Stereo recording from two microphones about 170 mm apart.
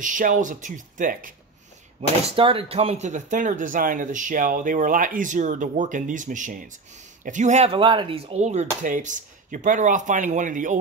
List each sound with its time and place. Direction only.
0.0 s speech: 50° right (ahead or behind)
2.0 s speech: 35° right (ahead or behind); by 10.8 s 50° right (ahead or behind)